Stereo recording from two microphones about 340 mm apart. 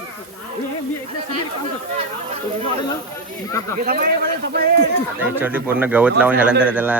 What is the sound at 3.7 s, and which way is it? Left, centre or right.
A man's voice, right.